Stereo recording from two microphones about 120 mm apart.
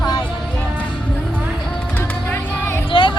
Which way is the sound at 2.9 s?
45° left (ahead or behind).